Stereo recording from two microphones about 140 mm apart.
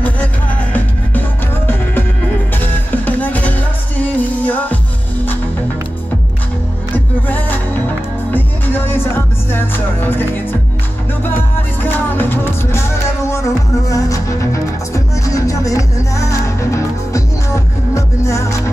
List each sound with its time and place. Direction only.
2.6 s music: 15° left (ahead or behind)
7.2 s music: 15° left (ahead or behind)
11.8 s music: 15° left (ahead or behind)